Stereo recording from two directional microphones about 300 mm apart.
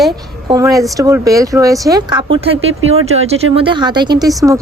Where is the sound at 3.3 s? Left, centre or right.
Centre.